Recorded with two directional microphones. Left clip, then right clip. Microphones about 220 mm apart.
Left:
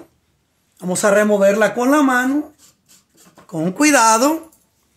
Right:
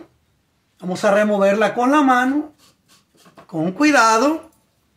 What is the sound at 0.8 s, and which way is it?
Speech, 40° left (ahead or behind).